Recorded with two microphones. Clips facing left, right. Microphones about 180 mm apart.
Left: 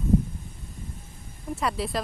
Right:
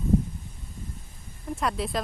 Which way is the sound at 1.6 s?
Centre (ahead or behind).